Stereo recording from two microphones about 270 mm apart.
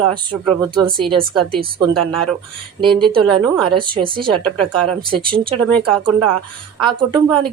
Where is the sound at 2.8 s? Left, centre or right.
Centre.